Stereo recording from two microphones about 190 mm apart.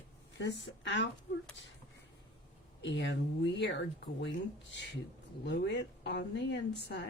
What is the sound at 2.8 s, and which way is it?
Speech, 70° left (ahead or behind).